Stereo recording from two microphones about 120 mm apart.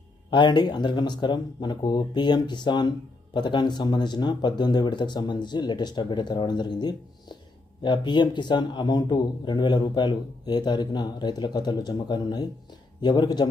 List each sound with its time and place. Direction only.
0.3 s speech: 40° left (ahead or behind)